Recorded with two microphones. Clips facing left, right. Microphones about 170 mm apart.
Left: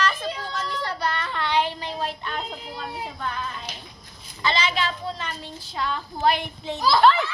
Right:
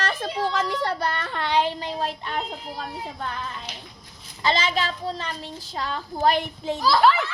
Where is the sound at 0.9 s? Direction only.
50° right (ahead or behind).